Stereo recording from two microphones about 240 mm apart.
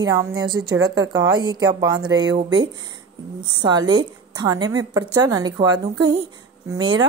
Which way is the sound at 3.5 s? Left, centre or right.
Centre.